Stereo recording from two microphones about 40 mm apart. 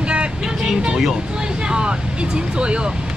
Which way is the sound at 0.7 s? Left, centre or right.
Right.